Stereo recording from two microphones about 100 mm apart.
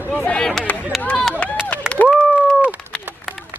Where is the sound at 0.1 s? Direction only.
5° left (ahead or behind).